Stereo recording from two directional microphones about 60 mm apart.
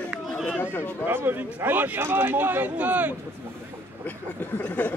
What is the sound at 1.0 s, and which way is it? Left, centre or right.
Speech, right.